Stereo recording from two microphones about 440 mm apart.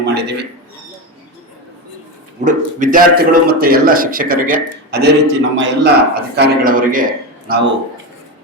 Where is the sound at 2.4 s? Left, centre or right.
Centre.